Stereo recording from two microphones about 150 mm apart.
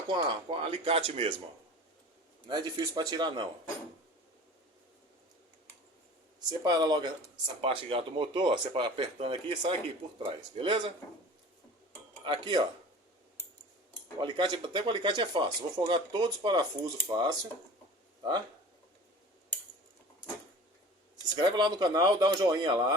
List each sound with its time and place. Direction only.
0.1 s speech: 35° right (ahead or behind)
2.5 s speech: 25° right (ahead or behind)
6.6 s speech: 25° right (ahead or behind)
12.2 s speech: 30° right (ahead or behind)
14.2 s speech: 30° right (ahead or behind)
21.4 s speech: 30° right (ahead or behind)